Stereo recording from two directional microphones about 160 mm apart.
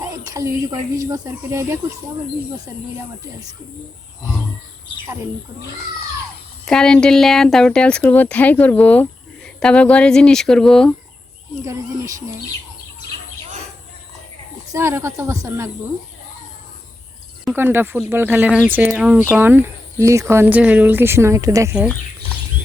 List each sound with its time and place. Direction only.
0.0 s speech: 20° right (ahead or behind)
6.7 s speech: 5° left (ahead or behind)
11.6 s speech: 20° right (ahead or behind)
14.7 s speech: 15° right (ahead or behind)
17.5 s speech: 15° right (ahead or behind)